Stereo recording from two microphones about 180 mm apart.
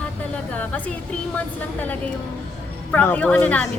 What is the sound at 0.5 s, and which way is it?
Speech, 10° left (ahead or behind).